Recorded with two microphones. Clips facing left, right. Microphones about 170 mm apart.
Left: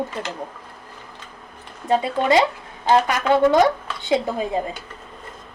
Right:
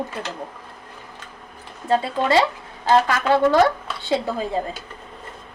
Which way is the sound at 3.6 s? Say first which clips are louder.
Even; 20° left (ahead or behind).